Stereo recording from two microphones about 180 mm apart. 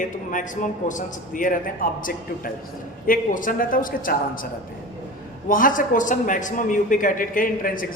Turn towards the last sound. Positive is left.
turn(degrees=50)  # may be behind; listen again after turning